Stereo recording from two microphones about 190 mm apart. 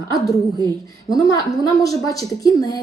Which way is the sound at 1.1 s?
20° left (ahead or behind).